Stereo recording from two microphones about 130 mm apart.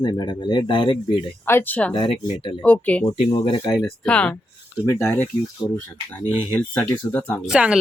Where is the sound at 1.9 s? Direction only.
45° left (ahead or behind).